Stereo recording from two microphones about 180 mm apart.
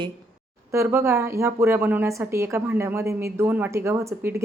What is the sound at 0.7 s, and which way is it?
Speech, 15° right (ahead or behind).